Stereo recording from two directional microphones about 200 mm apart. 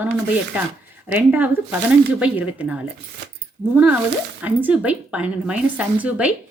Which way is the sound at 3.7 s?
10° right (ahead or behind).